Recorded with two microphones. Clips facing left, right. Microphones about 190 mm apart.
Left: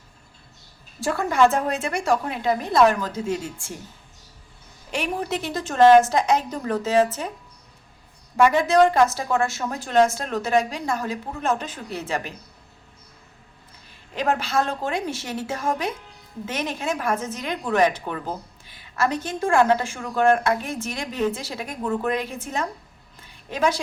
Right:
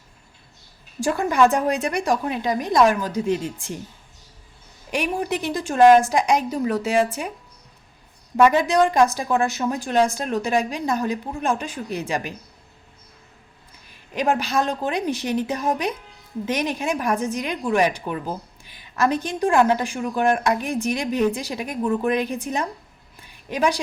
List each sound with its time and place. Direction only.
0.9 s a woman's voice: 15° right (ahead or behind)
4.9 s a woman's voice: 15° right (ahead or behind)
8.5 s a woman's voice: 15° right (ahead or behind)
14.2 s a woman's voice: 15° right (ahead or behind)
23.2 s a sound: 15° right (ahead or behind)